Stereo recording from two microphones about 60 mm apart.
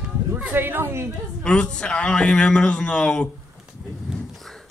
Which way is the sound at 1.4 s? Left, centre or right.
Centre.